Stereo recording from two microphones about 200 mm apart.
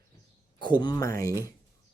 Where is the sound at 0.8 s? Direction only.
20° left (ahead or behind).